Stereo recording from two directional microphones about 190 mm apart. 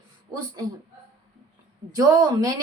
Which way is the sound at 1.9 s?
20° right (ahead or behind).